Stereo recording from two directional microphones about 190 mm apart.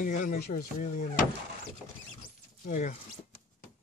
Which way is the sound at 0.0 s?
45° left (ahead or behind).